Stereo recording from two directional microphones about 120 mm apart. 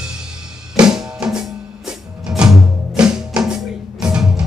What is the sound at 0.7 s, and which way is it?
Drum kit, 5° right (ahead or behind).